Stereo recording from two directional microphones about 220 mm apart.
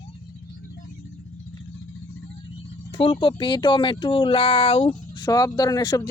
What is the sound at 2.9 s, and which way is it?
Speech, 25° left (ahead or behind).